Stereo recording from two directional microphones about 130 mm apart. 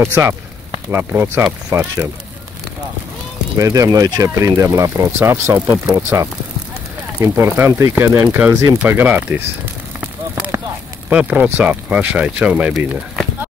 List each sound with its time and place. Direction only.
0.0 s speech: 20° right (ahead or behind)
3.5 s speech: 25° right (ahead or behind)
9.9 s a sound: 10° right (ahead or behind)
11.1 s speech: 10° right (ahead or behind)